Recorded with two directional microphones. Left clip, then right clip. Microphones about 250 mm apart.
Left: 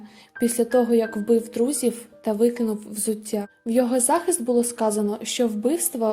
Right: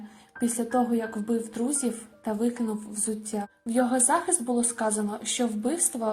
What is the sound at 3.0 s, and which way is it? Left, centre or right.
Speech, left.